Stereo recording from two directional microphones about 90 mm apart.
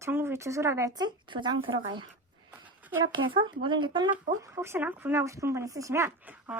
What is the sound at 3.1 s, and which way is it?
Speech, 60° right (ahead or behind).